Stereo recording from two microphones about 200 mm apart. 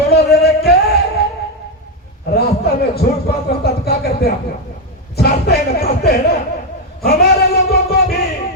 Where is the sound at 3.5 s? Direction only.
50° left (ahead or behind).